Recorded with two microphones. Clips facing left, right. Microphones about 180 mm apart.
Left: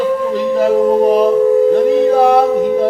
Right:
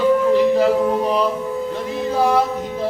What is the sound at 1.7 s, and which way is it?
Music, 60° left (ahead or behind).